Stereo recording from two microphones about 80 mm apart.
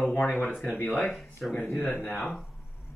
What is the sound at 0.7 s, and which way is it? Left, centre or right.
Speech, left.